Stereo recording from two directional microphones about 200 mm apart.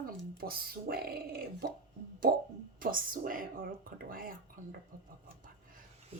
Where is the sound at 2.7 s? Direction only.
45° right (ahead or behind).